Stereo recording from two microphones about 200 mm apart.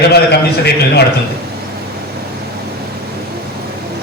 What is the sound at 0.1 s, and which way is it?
Speech, 55° left (ahead or behind).